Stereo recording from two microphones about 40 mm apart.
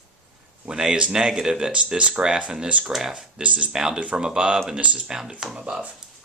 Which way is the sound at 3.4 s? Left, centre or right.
Right.